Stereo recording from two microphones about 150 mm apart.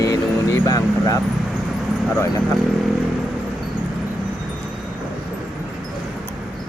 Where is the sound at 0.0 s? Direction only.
20° left (ahead or behind).